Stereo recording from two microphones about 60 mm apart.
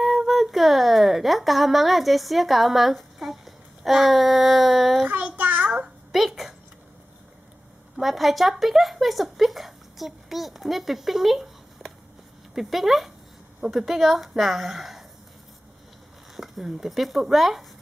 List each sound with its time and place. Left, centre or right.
0.0 s speech: centre
5.1 s child singing: right
5.7 s a sound: centre
7.9 s a woman's voice: centre
16.3 s a woman's voice: centre